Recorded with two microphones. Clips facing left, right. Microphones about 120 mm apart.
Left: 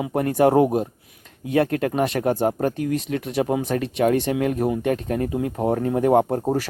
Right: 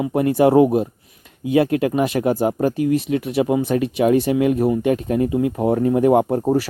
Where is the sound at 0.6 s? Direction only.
Centre (ahead or behind).